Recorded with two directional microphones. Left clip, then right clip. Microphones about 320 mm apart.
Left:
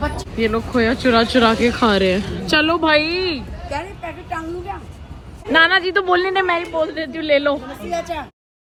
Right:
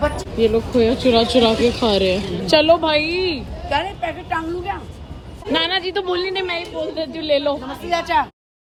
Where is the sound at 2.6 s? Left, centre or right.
Centre.